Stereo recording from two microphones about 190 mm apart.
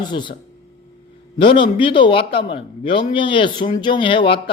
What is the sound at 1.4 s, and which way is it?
A man's voice, 25° left (ahead or behind).